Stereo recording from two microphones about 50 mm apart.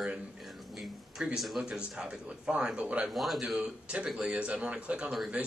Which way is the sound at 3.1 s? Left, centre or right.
Centre.